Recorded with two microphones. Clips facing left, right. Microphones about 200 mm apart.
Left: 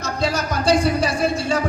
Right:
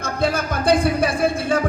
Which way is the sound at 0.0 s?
55° right (ahead or behind).